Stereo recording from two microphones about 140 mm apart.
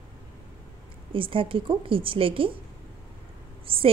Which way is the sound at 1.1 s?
40° right (ahead or behind).